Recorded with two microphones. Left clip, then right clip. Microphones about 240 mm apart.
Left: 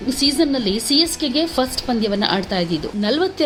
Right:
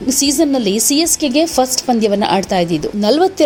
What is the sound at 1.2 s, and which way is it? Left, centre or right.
Speech, right.